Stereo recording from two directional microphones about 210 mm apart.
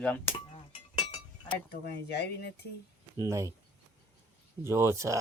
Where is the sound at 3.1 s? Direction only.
15° right (ahead or behind).